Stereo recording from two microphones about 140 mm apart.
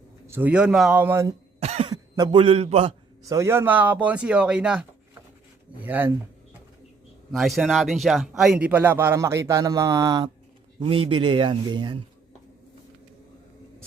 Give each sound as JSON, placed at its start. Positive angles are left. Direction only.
{"t": 0.3, "sound": "speech", "side_deg": -15}
{"t": 1.0, "sound": "speech", "side_deg": -20}
{"t": 1.5, "sound": "cough", "side_deg": -45}
{"t": 1.9, "sound": "a man's voice", "side_deg": -30}
{"t": 3.2, "sound": "speech", "side_deg": -20}
{"t": 7.3, "sound": "speech", "side_deg": 0}
{"t": 10.8, "sound": "a man's voice", "side_deg": -40}